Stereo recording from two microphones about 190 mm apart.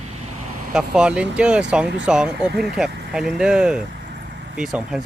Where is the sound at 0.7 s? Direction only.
5° right (ahead or behind).